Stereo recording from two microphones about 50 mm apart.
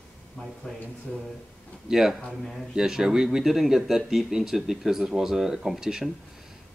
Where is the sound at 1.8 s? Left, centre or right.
Centre.